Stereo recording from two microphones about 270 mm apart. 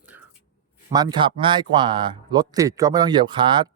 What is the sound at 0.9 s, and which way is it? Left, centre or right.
Speech, centre.